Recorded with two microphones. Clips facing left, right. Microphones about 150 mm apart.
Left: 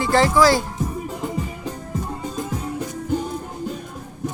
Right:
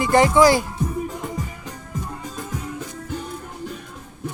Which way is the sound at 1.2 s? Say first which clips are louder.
Left 4 dB; 30° left (ahead or behind).